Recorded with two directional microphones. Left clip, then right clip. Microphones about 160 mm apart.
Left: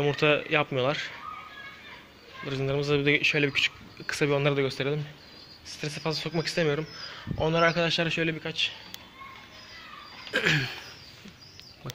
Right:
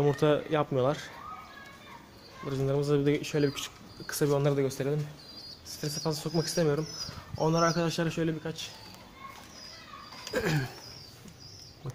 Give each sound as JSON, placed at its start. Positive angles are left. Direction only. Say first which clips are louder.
{"t": 0.0, "sound": "speech", "louder": "left 2 dB", "side_deg": -20}
{"t": 2.4, "sound": "a man's voice", "louder": "left 1 dB", "side_deg": -5}
{"t": 5.9, "sound": "a man's voice", "louder": "left 1 dB", "side_deg": -10}
{"t": 10.3, "sound": "speech", "louder": "left 6 dB", "side_deg": -10}